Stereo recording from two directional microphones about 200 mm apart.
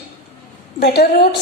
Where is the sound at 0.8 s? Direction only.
50° left (ahead or behind).